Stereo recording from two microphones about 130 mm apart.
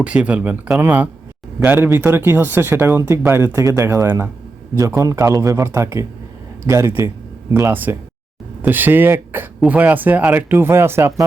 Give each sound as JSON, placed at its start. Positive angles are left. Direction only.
{"t": 0.0, "sound": "speech", "side_deg": -10}